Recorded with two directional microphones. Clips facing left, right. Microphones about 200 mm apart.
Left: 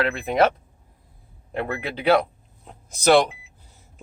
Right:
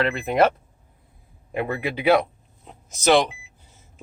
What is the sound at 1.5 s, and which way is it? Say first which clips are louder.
Speech: right 2 dB; 10° right (ahead or behind).